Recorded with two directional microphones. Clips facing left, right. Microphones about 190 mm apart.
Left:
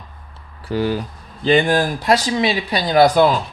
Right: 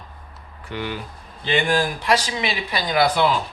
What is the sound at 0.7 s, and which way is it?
Speech, 40° left (ahead or behind).